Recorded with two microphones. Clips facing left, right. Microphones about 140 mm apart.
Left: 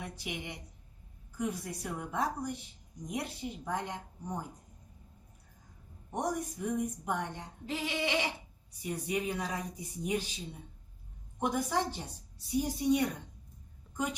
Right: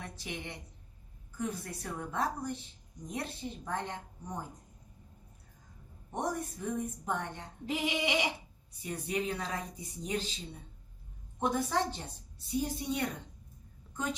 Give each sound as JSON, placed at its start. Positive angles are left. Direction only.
{"t": 0.0, "sound": "a woman's voice", "side_deg": 15}
{"t": 6.1, "sound": "a woman's voice", "side_deg": 15}
{"t": 7.7, "sound": "a sound", "side_deg": -15}
{"t": 8.8, "sound": "a woman's voice", "side_deg": 15}